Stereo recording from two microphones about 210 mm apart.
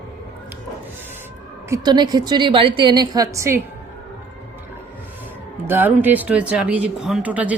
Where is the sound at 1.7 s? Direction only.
20° right (ahead or behind).